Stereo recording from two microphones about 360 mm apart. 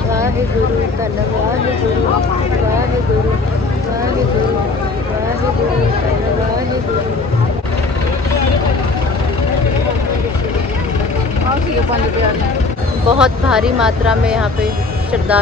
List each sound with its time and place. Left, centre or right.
13.2 s speech: centre